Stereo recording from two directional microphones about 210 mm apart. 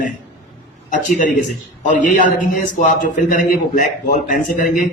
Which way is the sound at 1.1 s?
40° left (ahead or behind).